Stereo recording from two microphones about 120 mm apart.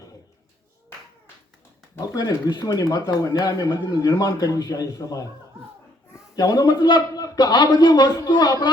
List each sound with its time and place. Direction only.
2.0 s speech: 35° left (ahead or behind)
6.3 s speech: 30° left (ahead or behind)